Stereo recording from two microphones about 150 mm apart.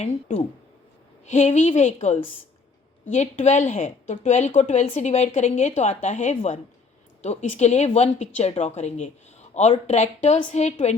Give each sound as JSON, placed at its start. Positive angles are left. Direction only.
{"t": 0.0, "sound": "a woman's voice", "side_deg": 40}
{"t": 3.2, "sound": "a woman's voice", "side_deg": 50}